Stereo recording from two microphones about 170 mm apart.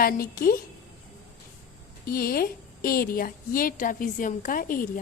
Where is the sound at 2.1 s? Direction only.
60° left (ahead or behind).